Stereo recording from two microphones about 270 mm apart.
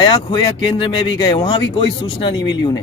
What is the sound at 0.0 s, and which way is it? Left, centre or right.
Speech, centre.